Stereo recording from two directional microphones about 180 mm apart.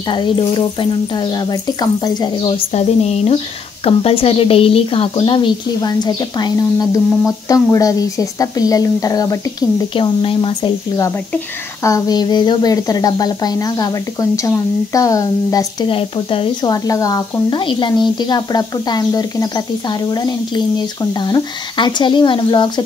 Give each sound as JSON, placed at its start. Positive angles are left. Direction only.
{"t": 0.1, "sound": "a woman's voice", "side_deg": 25}
{"t": 11.8, "sound": "a woman's voice", "side_deg": 20}
{"t": 16.7, "sound": "a woman's voice", "side_deg": 20}